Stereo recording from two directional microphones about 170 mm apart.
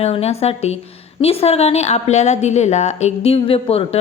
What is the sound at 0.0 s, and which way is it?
A woman's voice, 40° left (ahead or behind).